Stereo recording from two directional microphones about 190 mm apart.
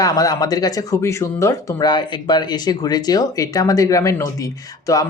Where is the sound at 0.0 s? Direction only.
20° left (ahead or behind).